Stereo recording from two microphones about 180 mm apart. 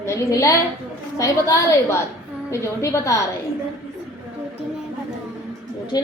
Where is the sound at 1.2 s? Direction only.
15° left (ahead or behind).